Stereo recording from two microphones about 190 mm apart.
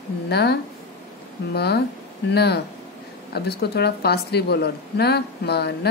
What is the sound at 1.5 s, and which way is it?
Speech, 60° left (ahead or behind).